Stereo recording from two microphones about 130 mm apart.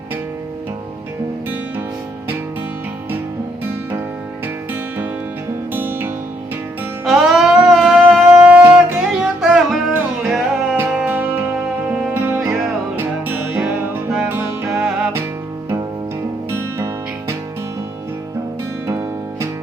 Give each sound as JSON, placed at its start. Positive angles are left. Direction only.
{"t": 5.7, "sound": "music", "side_deg": -15}
{"t": 7.0, "sound": "music", "side_deg": -5}
{"t": 10.8, "sound": "music", "side_deg": -15}
{"t": 16.5, "sound": "music", "side_deg": -20}
{"t": 18.9, "sound": "music", "side_deg": -20}